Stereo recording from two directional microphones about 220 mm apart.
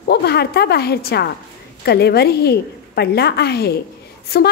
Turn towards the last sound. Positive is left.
turn(degrees=45)  # may be behind; listen again after turning